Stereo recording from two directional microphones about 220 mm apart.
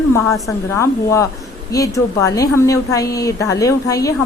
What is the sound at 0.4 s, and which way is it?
A woman's voice, 15° left (ahead or behind).